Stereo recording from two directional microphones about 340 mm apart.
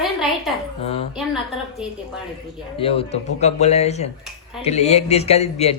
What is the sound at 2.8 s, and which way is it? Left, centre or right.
Speech, centre.